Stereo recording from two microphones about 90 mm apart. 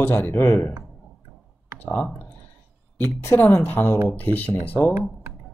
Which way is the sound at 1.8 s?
15° left (ahead or behind).